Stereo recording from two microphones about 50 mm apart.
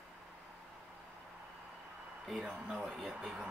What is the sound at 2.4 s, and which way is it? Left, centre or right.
Speech, centre.